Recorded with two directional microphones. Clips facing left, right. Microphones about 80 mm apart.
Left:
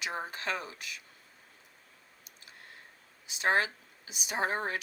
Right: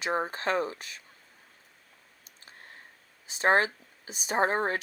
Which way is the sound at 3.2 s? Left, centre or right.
Right.